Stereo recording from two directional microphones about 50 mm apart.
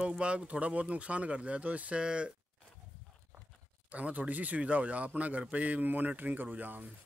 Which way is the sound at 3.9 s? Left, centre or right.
Right.